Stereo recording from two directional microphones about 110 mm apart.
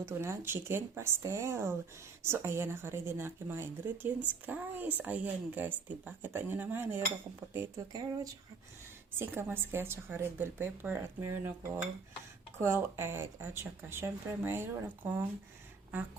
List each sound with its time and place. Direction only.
0.0 s a woman's voice: 25° right (ahead or behind)
9.1 s a woman's voice: 20° right (ahead or behind)